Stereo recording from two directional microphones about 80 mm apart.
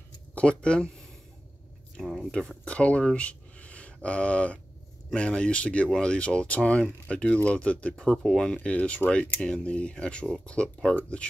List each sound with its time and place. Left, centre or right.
0.3 s speech: centre
2.0 s a sound: centre
2.3 s speech: centre
8.5 s speech: centre